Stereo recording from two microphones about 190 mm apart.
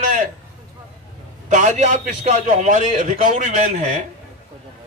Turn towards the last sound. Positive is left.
turn(degrees=-40)  # may be behind; listen again after turning